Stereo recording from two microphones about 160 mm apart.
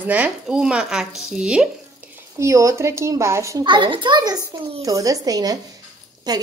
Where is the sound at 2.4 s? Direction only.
20° right (ahead or behind).